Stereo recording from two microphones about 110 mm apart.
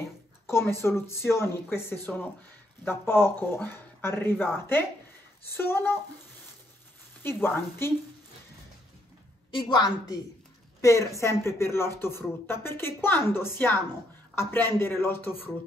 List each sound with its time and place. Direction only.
0.5 s speech: 25° left (ahead or behind)
7.2 s speech: 20° left (ahead or behind)
9.5 s a woman's voice: 45° left (ahead or behind)
10.8 s speech: 30° left (ahead or behind)